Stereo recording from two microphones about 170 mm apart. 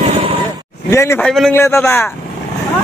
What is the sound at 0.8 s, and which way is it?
Speech, 15° left (ahead or behind).